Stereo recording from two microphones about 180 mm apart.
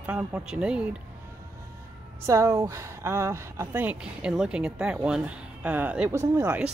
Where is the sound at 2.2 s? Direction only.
15° right (ahead or behind).